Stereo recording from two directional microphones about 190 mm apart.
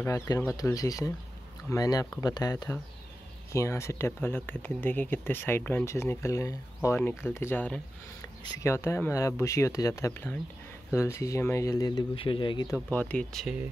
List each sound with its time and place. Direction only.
0.0 s speech: 15° left (ahead or behind)